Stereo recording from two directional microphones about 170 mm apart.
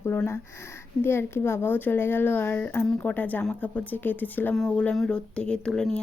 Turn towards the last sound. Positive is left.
turn(degrees=5)  # may be behind; listen again after turning